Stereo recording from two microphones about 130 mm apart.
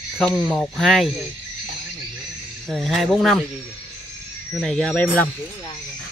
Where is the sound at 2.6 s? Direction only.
Centre (ahead or behind).